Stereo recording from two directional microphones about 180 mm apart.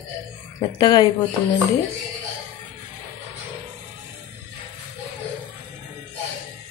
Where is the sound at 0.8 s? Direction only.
25° left (ahead or behind).